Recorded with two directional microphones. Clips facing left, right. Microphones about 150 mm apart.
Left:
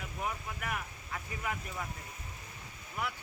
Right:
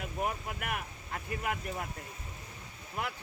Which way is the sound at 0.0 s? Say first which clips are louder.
Right 4 dB; 55° right (ahead or behind).